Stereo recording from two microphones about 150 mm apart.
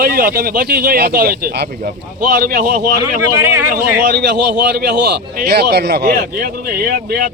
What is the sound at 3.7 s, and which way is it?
A man's voice, 90° right.